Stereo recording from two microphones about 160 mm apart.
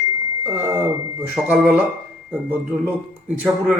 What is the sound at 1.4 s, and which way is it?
Speech, 10° right (ahead or behind).